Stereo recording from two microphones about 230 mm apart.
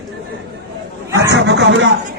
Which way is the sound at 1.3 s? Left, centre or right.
Right.